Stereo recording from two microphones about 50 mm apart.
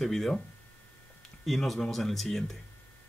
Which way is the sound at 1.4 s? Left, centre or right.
Centre.